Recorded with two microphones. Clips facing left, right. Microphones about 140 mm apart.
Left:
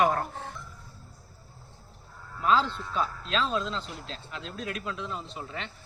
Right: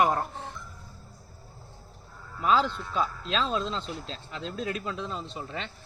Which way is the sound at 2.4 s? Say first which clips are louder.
Right 1 dB; 15° right (ahead or behind).